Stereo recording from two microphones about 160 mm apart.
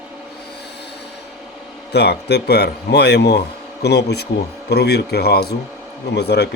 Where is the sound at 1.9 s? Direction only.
90° left.